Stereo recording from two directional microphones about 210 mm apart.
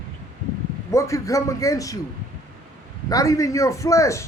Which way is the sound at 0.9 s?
15° left (ahead or behind).